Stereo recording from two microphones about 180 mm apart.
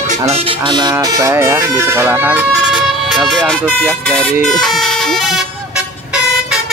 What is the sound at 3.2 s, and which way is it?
Speech, centre (ahead or behind).